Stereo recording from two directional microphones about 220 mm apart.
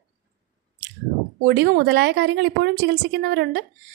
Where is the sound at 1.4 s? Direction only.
50° right (ahead or behind).